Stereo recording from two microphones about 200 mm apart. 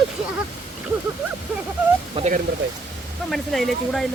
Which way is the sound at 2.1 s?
35° right (ahead or behind).